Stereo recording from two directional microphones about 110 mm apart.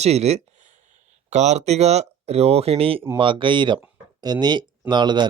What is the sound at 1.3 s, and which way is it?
Speech, 90° right.